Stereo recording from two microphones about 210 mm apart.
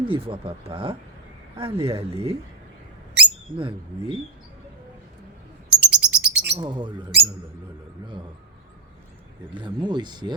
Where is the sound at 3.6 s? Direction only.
25° right (ahead or behind).